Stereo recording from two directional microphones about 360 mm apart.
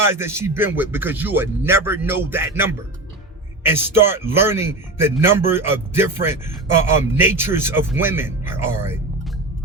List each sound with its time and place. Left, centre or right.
0.0 s speech: centre